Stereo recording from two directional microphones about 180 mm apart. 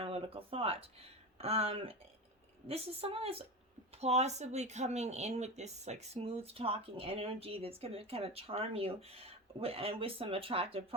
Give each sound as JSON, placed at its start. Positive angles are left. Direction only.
{"t": 0.0, "sound": "speech", "side_deg": -30}